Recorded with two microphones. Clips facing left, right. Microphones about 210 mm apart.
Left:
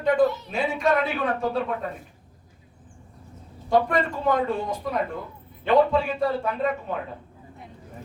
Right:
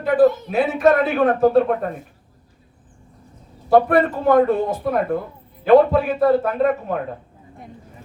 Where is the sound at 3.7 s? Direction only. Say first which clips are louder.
Right 7 dB; 60° right (ahead or behind).